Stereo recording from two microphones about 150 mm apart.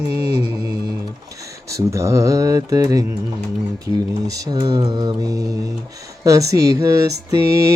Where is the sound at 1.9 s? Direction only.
20° right (ahead or behind).